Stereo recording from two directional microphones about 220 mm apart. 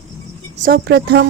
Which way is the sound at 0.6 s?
45° right (ahead or behind).